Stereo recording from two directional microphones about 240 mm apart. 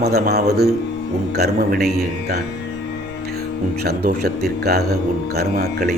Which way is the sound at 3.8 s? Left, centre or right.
Right.